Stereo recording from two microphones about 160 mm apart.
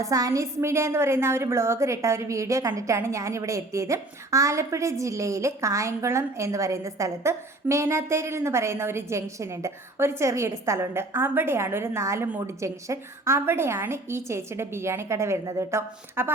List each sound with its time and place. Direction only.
0.0 s a woman's voice: 20° right (ahead or behind)